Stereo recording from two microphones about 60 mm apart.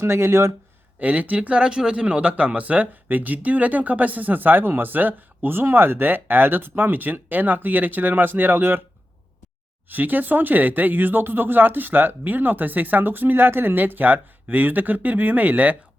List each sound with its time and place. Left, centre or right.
0.0 s speech: right
0.9 s speech: right
9.9 s speech: right